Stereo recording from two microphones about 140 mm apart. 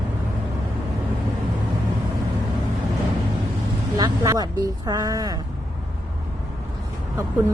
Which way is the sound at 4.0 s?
25° right (ahead or behind).